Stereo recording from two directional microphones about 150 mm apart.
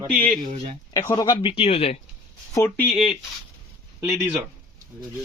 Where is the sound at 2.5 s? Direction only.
20° left (ahead or behind).